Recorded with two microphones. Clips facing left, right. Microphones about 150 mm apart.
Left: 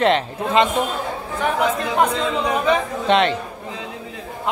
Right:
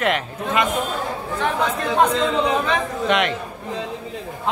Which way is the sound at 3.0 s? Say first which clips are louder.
Left 3 dB; 30° left (ahead or behind).